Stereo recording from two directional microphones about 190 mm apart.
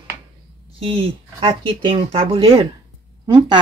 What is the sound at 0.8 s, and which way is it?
Speech, 30° right (ahead or behind).